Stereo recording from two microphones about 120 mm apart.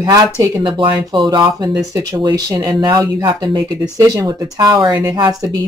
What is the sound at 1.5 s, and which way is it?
Speech, 30° right (ahead or behind).